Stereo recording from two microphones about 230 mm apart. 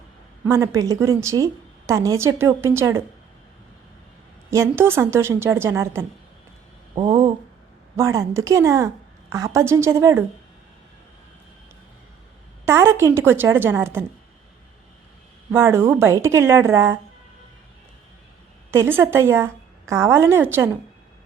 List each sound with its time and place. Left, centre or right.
0.4 s a woman's voice: centre
4.5 s a woman's voice: centre
12.6 s a woman's voice: centre
15.5 s a woman's voice: centre
18.7 s a woman's voice: centre